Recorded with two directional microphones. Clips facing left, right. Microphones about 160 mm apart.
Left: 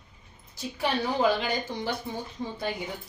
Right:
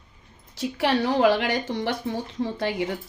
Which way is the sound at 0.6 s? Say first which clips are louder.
Right 6 dB; 90° right.